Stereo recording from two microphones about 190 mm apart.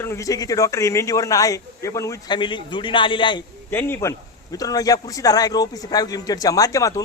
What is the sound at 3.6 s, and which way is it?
A man's voice, 10° left (ahead or behind).